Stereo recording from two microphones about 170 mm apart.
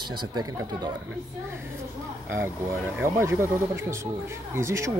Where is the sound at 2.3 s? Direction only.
15° right (ahead or behind).